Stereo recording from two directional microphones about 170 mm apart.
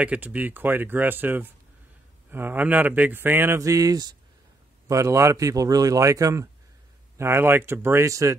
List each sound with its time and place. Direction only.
0.0 s speech: 10° right (ahead or behind)